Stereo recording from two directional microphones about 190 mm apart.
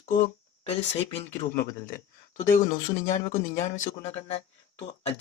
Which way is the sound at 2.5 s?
45° left (ahead or behind).